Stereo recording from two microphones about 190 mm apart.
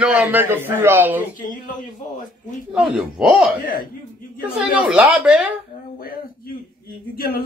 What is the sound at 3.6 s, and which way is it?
Speech, 45° left (ahead or behind).